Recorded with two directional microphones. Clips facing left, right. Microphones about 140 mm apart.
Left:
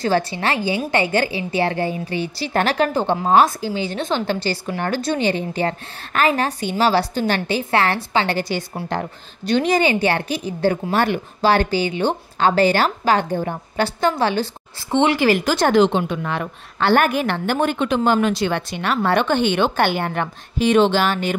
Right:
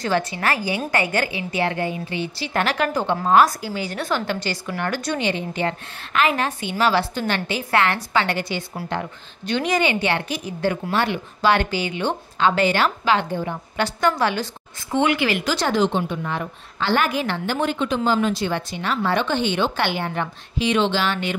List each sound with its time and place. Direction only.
0.0 s a woman's voice: 30° left (ahead or behind)
15.1 s speech: 40° left (ahead or behind)
15.8 s speech: 85° left
16.9 s a woman's voice: 50° left (ahead or behind)